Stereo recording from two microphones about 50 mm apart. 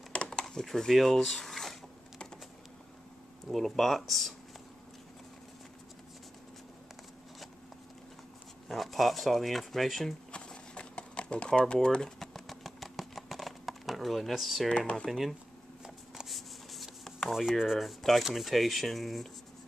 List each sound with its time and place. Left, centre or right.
0.1 s a sound: centre
0.7 s speech: centre
3.5 s speech: centre
8.6 s speech: centre
10.3 s a sound: left
12.2 s a sound: centre
15.0 s speech: centre
16.3 s writing: centre
17.6 s speech: centre